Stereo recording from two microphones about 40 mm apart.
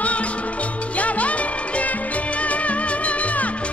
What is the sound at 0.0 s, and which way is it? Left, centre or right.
Music, left.